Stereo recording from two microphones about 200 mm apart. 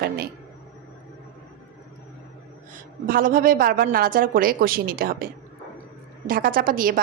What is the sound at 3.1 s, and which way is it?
A woman's voice, 45° right (ahead or behind).